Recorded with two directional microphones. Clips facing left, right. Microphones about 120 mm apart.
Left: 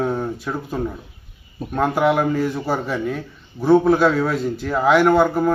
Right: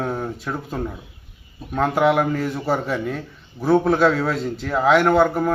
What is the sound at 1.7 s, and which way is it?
Speech, 5° left (ahead or behind).